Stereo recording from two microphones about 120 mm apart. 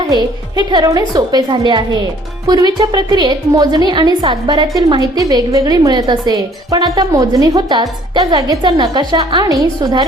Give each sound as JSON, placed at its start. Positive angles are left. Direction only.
{"t": 0.1, "sound": "a woman's voice", "side_deg": -35}